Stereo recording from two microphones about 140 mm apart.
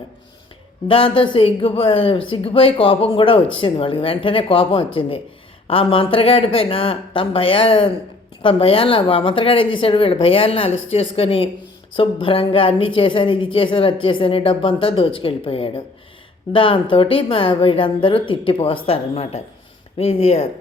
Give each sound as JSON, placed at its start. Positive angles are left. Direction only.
{"t": 0.9, "sound": "a woman's voice", "side_deg": 40}